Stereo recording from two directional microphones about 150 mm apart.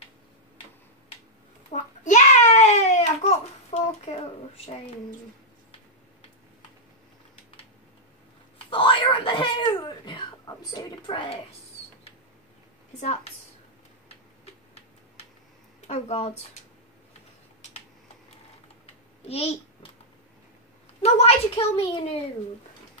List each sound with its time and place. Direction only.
1.7 s a sound: 50° left (ahead or behind)
8.5 s whispering: 35° left (ahead or behind)
13.0 s a woman's voice: 50° left (ahead or behind)
14.0 s tick-tock: 45° left (ahead or behind)
15.9 s speech: 45° left (ahead or behind)
19.2 s a sound: 45° left (ahead or behind)
21.0 s a child's voice: 40° left (ahead or behind)